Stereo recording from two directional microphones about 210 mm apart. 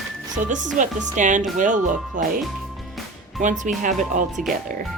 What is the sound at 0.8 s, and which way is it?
Speech, 35° right (ahead or behind).